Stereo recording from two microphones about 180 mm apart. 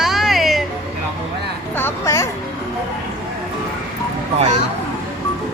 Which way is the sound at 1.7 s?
15° left (ahead or behind).